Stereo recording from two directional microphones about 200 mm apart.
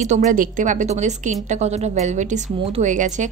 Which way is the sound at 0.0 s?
35° right (ahead or behind).